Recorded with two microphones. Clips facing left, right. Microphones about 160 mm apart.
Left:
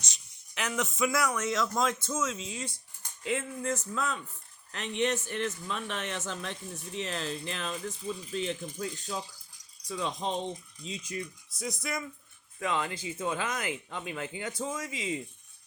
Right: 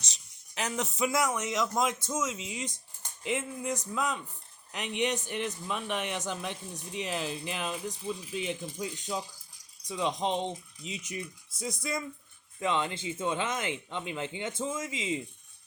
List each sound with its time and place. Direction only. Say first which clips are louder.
0.0 s a man's voice: even; 35° right (ahead or behind)